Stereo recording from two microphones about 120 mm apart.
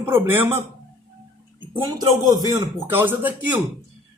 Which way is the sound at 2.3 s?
30° right (ahead or behind).